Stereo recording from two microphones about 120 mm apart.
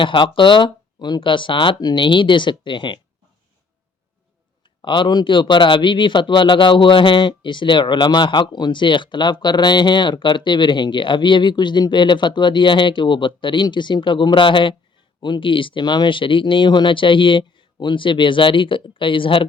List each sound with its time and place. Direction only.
0.0 s speech: 45° left (ahead or behind)
4.8 s a man's voice: 40° left (ahead or behind)